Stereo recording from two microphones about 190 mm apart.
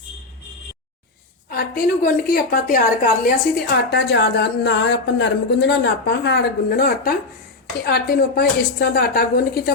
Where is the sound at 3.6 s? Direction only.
60° left (ahead or behind).